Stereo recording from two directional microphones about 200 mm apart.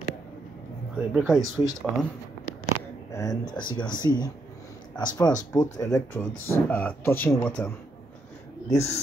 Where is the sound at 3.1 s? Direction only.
15° left (ahead or behind).